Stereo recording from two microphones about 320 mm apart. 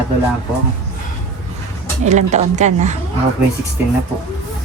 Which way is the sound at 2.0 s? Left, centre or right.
Right.